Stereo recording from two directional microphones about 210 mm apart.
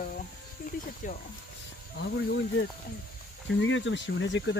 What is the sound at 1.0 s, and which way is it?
Insect, 40° left (ahead or behind).